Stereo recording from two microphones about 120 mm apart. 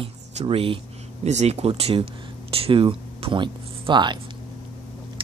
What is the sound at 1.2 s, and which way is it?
Speech, 65° right (ahead or behind).